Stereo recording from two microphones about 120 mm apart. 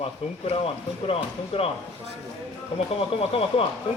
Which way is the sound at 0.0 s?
55° left (ahead or behind).